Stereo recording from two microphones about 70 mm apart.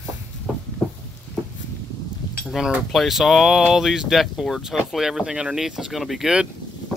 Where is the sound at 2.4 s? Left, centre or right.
Centre.